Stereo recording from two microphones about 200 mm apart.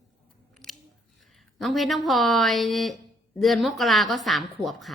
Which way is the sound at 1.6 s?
Centre (ahead or behind).